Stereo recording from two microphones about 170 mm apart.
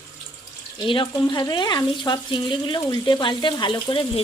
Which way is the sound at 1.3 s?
25° left (ahead or behind).